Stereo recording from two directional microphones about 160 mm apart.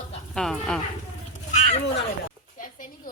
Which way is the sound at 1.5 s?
45° left (ahead or behind).